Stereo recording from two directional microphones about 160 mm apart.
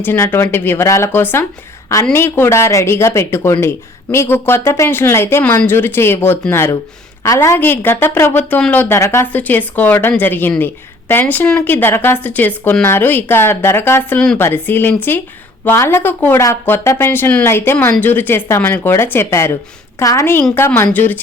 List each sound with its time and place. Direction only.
0.0 s a woman's voice: 15° left (ahead or behind)